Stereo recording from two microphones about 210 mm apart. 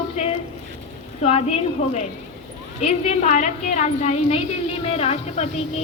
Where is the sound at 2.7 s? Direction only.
30° left (ahead or behind).